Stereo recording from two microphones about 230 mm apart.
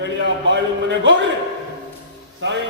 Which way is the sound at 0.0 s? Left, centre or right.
Right.